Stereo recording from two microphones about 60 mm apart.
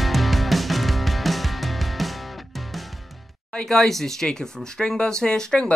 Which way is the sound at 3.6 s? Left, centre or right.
Centre.